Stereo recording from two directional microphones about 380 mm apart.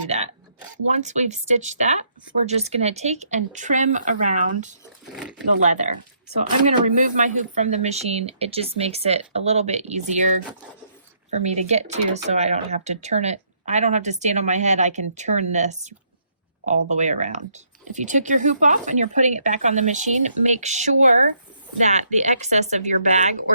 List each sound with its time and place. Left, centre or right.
0.1 s speech: centre
11.4 s speech: centre